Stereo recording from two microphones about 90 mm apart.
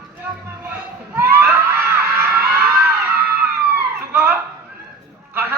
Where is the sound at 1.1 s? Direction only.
25° right (ahead or behind).